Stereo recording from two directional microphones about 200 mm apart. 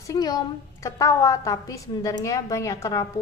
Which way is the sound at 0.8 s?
15° left (ahead or behind).